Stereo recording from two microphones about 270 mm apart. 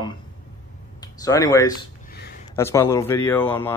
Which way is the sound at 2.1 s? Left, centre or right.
Left.